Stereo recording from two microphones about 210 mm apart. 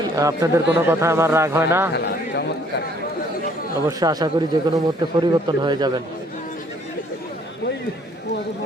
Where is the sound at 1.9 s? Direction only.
50° left (ahead or behind).